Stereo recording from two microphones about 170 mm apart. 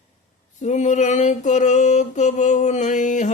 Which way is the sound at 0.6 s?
45° left (ahead or behind).